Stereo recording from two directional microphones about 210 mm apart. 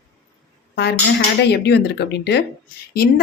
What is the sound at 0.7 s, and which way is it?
A woman's voice, 50° left (ahead or behind).